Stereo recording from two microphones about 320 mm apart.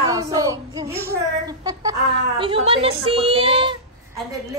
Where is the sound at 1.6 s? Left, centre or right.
Centre.